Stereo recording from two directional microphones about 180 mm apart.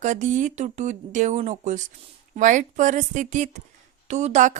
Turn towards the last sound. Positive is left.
turn(degrees=-45)  # may be behind; listen again after turning